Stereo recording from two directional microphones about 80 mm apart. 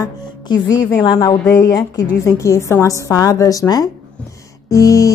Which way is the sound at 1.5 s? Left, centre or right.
Left.